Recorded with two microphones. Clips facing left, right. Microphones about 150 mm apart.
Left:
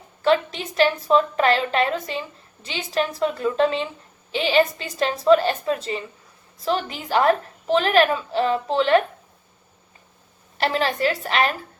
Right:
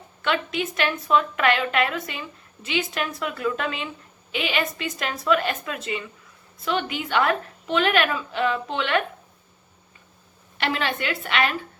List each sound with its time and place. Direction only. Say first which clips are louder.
0.2 s a woman's voice: left 5 dB; 35° left (ahead or behind)
10.6 s a woman's voice: left 5 dB; 35° left (ahead or behind)